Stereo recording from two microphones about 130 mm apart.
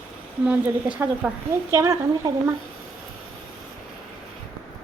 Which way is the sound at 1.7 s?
25° right (ahead or behind).